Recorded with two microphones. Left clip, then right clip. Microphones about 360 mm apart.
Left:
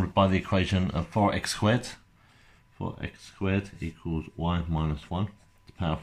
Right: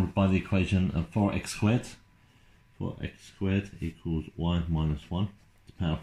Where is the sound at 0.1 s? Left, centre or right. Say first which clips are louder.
Left 7 dB; left.